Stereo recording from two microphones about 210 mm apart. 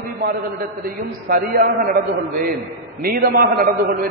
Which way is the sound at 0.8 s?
45° right (ahead or behind).